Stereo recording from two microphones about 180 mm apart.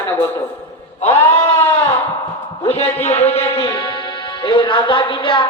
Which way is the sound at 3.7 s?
25° left (ahead or behind).